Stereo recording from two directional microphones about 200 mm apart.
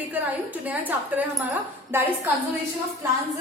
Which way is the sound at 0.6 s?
10° right (ahead or behind).